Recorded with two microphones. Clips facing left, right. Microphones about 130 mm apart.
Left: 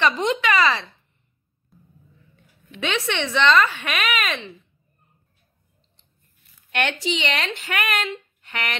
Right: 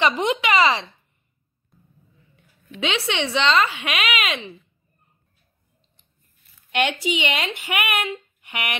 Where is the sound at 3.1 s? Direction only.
15° right (ahead or behind).